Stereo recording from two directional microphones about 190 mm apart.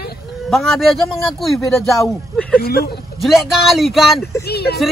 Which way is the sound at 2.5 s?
55° left (ahead or behind).